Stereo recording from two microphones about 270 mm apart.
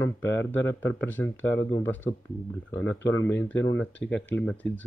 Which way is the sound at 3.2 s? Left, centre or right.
Centre.